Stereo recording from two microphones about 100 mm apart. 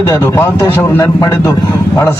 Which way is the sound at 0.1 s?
25° left (ahead or behind).